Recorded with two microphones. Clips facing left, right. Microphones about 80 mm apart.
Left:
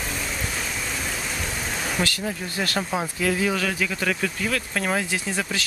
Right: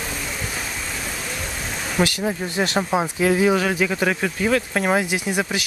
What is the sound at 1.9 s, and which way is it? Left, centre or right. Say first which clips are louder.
Speech: right 8 dB; centre.